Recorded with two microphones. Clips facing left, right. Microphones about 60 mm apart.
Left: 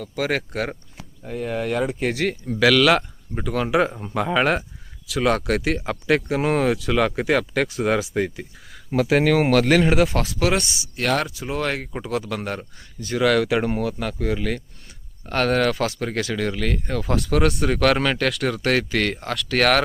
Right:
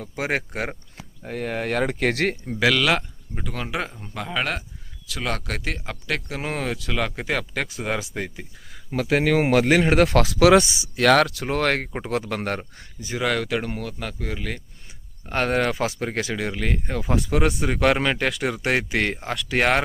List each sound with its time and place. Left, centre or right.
0.0 s speech: right
1.2 s speech: right
2.6 s speech: centre
9.5 s speech: centre
9.9 s speech: right
11.2 s speech: right
11.9 s a man's voice: right
13.0 s speech: centre
13.5 s speech: centre
15.3 s speech: centre